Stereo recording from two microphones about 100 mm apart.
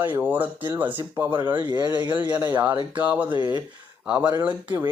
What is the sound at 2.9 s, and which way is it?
Speech, 15° right (ahead or behind).